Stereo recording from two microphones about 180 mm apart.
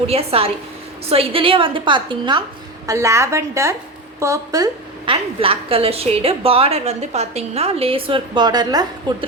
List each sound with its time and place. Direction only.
0.1 s a woman's voice: 35° right (ahead or behind)
5.1 s a woman's voice: 30° right (ahead or behind)